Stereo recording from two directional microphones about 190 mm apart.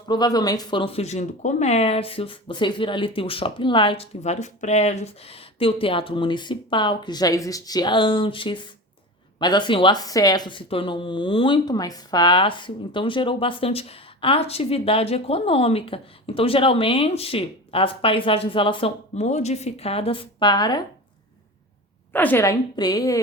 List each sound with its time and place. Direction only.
0.1 s speech: 20° left (ahead or behind)
22.1 s a woman's voice: 10° left (ahead or behind)